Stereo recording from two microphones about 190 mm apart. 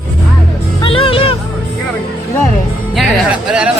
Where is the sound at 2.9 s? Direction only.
5° right (ahead or behind).